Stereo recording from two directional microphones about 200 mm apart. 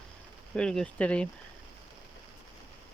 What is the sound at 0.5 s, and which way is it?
Speech, 5° left (ahead or behind).